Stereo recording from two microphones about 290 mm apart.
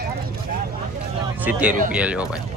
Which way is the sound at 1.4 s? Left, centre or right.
Centre.